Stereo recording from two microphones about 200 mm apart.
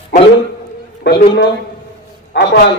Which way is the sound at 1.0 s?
55° left (ahead or behind).